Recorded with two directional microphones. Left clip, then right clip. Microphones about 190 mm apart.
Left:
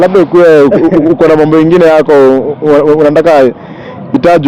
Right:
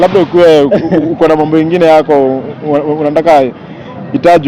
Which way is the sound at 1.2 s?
60° left (ahead or behind).